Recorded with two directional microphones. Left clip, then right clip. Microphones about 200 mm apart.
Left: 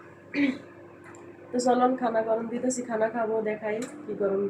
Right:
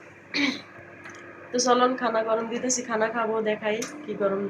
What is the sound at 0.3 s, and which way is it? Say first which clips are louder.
Throat clearing: right 2 dB; 15° left (ahead or behind).